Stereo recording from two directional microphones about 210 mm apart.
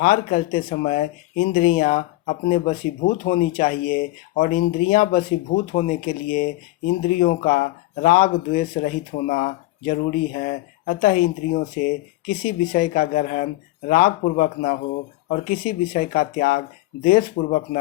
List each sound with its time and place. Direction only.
0.0 s speech: 40° left (ahead or behind)